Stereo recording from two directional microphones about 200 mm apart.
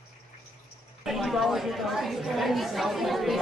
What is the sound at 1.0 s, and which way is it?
A woman's voice, centre (ahead or behind).